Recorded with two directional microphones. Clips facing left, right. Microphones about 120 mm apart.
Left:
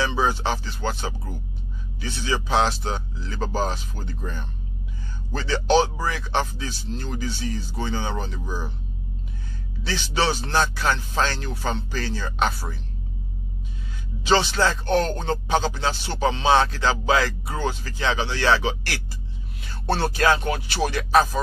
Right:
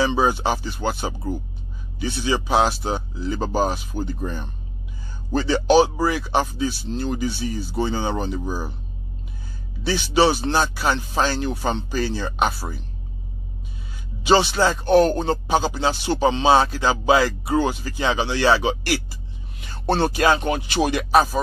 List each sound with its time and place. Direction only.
0.0 s speech: 15° right (ahead or behind)
9.8 s speech: 10° right (ahead or behind)
14.2 s speech: 10° right (ahead or behind)